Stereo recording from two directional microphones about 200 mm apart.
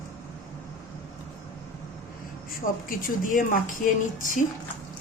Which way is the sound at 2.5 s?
45° left (ahead or behind).